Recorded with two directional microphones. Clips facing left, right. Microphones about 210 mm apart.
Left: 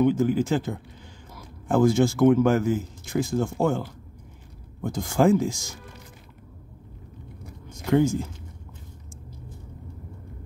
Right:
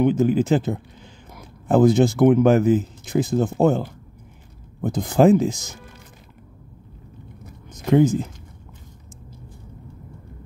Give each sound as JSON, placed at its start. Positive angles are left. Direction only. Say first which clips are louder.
{"t": 0.0, "sound": "speech", "louder": "right 3 dB", "side_deg": -20}
{"t": 4.8, "sound": "speech", "louder": "right 5 dB", "side_deg": -20}
{"t": 7.7, "sound": "speech", "louder": "right 4 dB", "side_deg": -20}